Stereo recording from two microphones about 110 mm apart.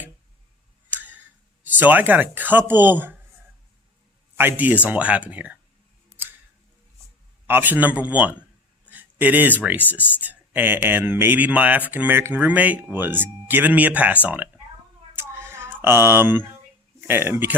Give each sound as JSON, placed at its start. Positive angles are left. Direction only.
{"t": 0.9, "sound": "a sound", "side_deg": -15}
{"t": 1.6, "sound": "speech", "side_deg": -15}
{"t": 4.4, "sound": "speech", "side_deg": -15}
{"t": 7.4, "sound": "speech", "side_deg": -15}
{"t": 15.1, "sound": "a sound", "side_deg": -20}
{"t": 17.0, "sound": "speech", "side_deg": -20}